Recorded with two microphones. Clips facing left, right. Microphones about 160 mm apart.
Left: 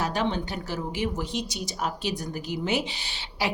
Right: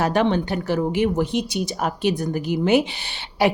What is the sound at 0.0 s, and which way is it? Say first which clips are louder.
Speech: right 7 dB; 60° right (ahead or behind).